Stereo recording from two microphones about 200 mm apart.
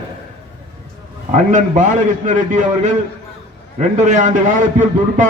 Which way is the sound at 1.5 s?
40° right (ahead or behind).